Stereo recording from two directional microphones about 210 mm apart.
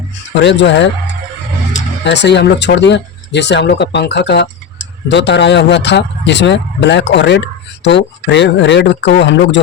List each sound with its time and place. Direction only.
0.3 s speech: 55° left (ahead or behind)
2.0 s speech: 55° left (ahead or behind)